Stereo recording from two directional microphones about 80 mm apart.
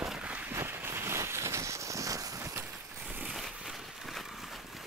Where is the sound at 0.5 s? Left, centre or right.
Right.